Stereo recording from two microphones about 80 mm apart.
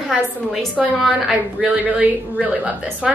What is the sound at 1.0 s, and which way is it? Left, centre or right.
A woman's voice, centre.